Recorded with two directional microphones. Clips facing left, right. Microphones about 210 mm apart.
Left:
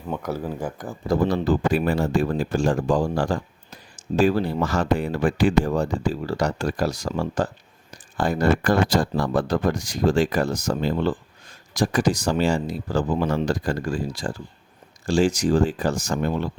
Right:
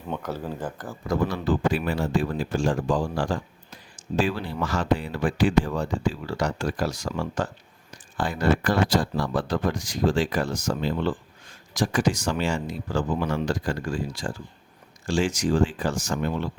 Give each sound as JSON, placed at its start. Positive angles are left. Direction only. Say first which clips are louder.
{"t": 0.1, "sound": "speech", "louder": "left 3 dB", "side_deg": 10}
{"t": 1.0, "sound": "speech", "louder": "left 4 dB", "side_deg": 35}